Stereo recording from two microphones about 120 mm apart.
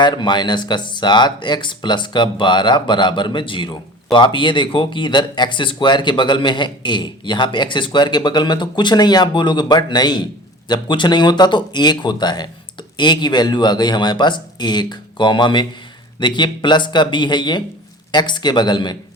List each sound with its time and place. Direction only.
0.0 s speech: 40° left (ahead or behind)